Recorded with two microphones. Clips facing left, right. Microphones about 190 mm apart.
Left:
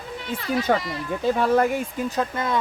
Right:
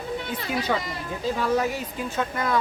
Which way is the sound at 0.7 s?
50° left (ahead or behind).